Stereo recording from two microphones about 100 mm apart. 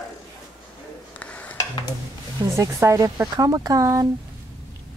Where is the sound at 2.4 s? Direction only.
30° right (ahead or behind).